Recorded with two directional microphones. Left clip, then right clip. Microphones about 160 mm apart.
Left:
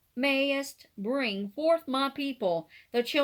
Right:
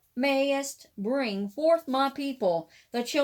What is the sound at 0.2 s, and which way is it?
Speech, 25° left (ahead or behind).